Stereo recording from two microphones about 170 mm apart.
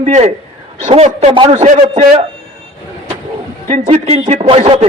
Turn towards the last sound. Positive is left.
turn(degrees=-35)  # may be behind; listen again after turning